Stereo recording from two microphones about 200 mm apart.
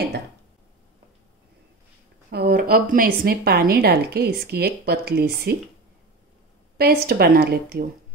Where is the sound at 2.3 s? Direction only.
50° right (ahead or behind).